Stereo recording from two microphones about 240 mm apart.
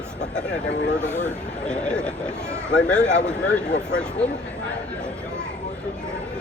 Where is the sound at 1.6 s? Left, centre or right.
Centre.